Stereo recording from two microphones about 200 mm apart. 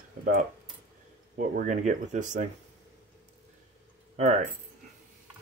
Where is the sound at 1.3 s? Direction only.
40° right (ahead or behind).